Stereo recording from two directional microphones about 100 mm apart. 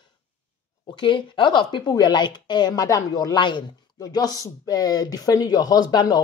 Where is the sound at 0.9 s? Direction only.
55° left (ahead or behind); by 3.4 s 35° left (ahead or behind).